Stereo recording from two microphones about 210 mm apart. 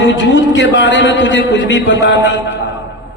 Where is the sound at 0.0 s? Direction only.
60° left (ahead or behind).